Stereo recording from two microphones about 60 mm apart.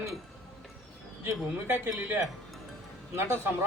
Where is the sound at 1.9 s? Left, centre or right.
Right.